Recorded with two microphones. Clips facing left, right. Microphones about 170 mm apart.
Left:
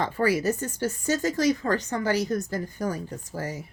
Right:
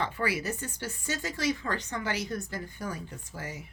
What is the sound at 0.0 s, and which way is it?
Speech, 40° left (ahead or behind).